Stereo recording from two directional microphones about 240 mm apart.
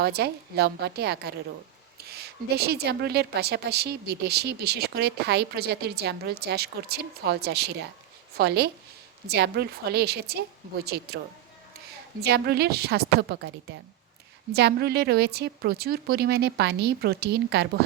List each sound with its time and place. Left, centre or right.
0.0 s a woman's voice: right
12.2 s a woman's voice: right